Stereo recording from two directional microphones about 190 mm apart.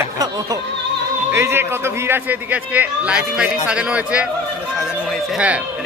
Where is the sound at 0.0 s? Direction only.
20° right (ahead or behind).